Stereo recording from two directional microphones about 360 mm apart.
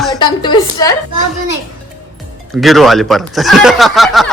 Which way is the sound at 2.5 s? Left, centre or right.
Centre.